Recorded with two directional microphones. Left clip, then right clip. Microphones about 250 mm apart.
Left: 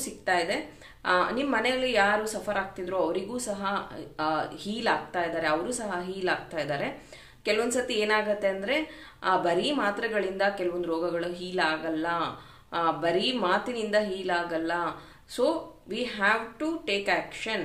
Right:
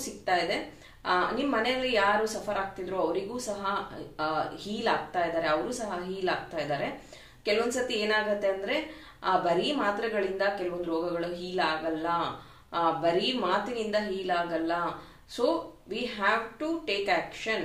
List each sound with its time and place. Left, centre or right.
0.2 s a woman's voice: left